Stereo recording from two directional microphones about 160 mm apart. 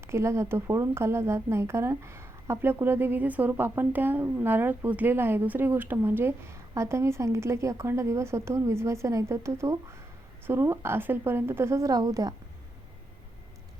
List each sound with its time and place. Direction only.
0.1 s a woman's voice: 15° right (ahead or behind)